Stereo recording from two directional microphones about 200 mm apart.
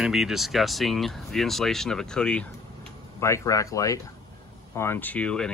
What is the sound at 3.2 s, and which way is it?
Speech, 15° left (ahead or behind).